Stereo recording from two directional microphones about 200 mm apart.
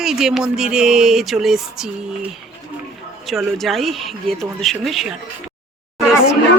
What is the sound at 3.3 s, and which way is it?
Speech, centre (ahead or behind).